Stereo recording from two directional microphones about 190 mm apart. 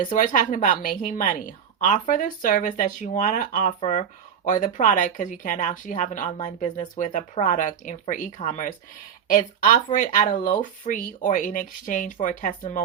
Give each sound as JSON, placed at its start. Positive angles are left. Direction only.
{"t": 0.0, "sound": "speech", "side_deg": 45}